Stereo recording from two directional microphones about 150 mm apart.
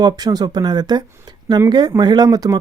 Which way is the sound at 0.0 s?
25° right (ahead or behind).